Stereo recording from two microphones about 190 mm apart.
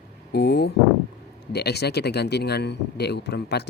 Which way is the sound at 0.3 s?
60° left (ahead or behind).